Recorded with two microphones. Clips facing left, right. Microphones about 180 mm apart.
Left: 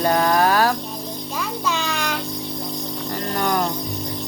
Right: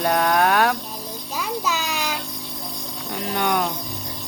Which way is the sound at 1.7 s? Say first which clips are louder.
Left 2 dB; 5° right (ahead or behind).